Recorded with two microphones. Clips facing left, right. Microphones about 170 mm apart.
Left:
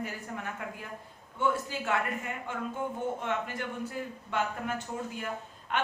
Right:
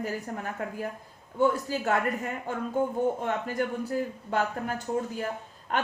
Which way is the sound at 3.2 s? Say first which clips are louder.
Right 5 dB; 40° right (ahead or behind).